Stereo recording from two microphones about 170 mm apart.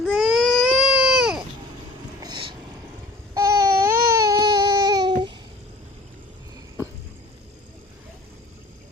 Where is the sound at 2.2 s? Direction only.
30° right (ahead or behind).